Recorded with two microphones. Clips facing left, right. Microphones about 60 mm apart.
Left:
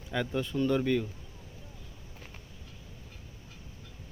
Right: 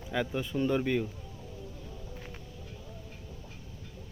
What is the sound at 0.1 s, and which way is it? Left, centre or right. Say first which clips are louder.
Speech: even; centre.